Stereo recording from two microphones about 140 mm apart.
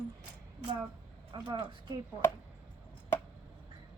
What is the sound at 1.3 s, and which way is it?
Speech, 30° right (ahead or behind).